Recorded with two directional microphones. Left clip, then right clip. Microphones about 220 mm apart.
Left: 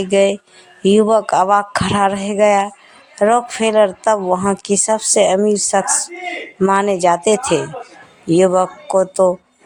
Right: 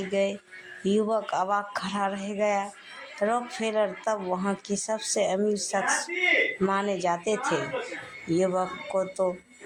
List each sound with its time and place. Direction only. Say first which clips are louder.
0.1 s speech: left 14 dB; 45° left (ahead or behind)